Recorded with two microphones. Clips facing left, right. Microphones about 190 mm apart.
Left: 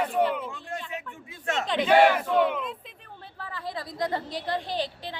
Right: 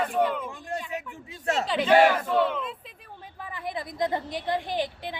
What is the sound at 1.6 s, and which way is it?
Speech, 5° right (ahead or behind).